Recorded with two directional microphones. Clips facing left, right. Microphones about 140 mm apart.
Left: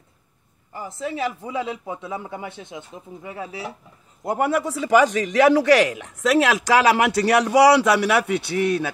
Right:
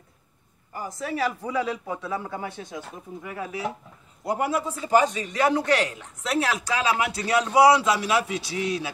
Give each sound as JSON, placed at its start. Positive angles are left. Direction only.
{"t": 0.7, "sound": "speech", "side_deg": 25}
{"t": 4.2, "sound": "a man's voice", "side_deg": 55}